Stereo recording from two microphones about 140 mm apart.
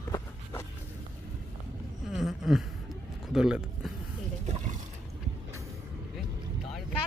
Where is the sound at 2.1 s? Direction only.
Centre (ahead or behind).